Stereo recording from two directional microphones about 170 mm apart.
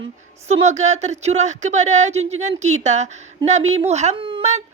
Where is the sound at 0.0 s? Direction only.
40° right (ahead or behind).